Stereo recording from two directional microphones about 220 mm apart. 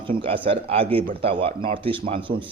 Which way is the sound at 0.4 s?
25° right (ahead or behind).